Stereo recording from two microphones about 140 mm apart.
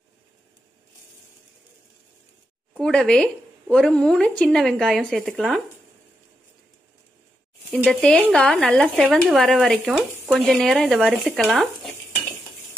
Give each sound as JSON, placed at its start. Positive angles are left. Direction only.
{"t": 2.8, "sound": "speech", "side_deg": 5}
{"t": 7.7, "sound": "speech", "side_deg": 5}